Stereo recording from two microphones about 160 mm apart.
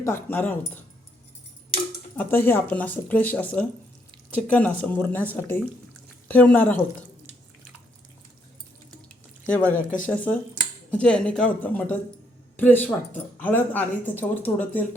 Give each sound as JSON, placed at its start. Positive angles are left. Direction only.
{"t": 0.0, "sound": "speech", "side_deg": 15}
{"t": 2.1, "sound": "speech", "side_deg": 10}
{"t": 9.5, "sound": "speech", "side_deg": 10}